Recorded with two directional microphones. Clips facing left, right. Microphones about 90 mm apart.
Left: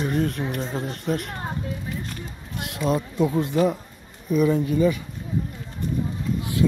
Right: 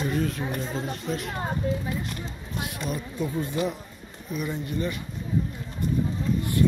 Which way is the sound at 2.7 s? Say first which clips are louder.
Left 8 dB; 90° left.